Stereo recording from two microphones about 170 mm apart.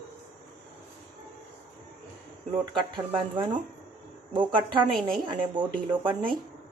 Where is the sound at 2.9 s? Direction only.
30° right (ahead or behind).